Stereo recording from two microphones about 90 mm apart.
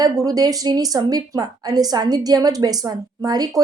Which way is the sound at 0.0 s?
45° right (ahead or behind).